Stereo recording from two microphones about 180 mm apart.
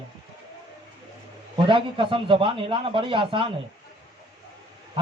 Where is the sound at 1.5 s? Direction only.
30° right (ahead or behind).